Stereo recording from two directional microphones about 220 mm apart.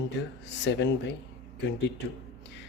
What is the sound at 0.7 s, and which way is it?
Speech, 55° left (ahead or behind).